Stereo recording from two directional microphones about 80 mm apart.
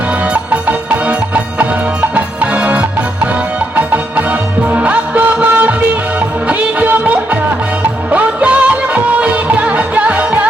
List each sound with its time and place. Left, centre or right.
0.5 s music: centre
4.7 s music: centre